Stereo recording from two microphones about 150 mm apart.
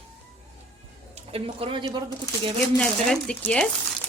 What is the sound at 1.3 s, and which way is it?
Speech, 40° right (ahead or behind).